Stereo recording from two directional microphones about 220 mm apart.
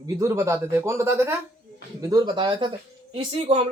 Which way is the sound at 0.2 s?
15° right (ahead or behind).